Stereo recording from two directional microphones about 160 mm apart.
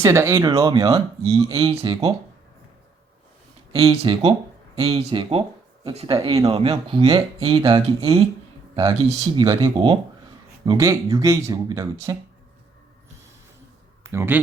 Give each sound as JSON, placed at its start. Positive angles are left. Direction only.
{"t": 0.0, "sound": "speech", "side_deg": -15}
{"t": 3.7, "sound": "speech", "side_deg": -35}
{"t": 14.0, "sound": "speech", "side_deg": -15}